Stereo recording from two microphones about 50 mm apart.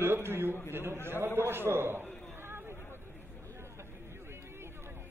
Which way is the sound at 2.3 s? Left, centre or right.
Right.